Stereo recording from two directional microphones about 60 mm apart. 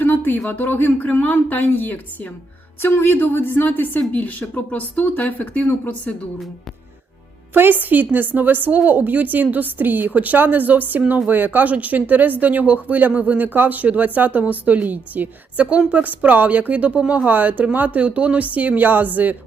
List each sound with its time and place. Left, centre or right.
0.0 s speech: left
2.8 s speech: left
7.5 s a woman's voice: right